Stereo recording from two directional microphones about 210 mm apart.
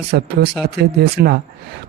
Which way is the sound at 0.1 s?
50° right (ahead or behind).